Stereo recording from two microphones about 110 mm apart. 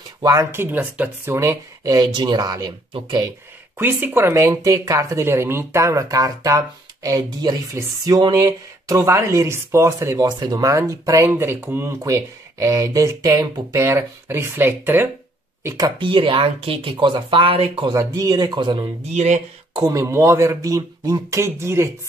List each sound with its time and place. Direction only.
0.2 s speech: 35° right (ahead or behind)
0.5 s speech: 20° right (ahead or behind); by 2.7 s 35° right (ahead or behind)
3.7 s speech: 20° right (ahead or behind)
15.8 s speech: 50° right (ahead or behind)
16.9 s speech: 45° right (ahead or behind)
17.8 s speech: 35° right (ahead or behind)
19.1 s speech: 90° right
19.7 s speech: 35° right (ahead or behind)